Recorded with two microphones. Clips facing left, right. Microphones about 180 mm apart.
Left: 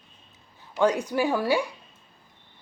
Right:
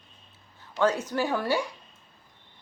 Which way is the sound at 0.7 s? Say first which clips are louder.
Left 2 dB; 15° left (ahead or behind).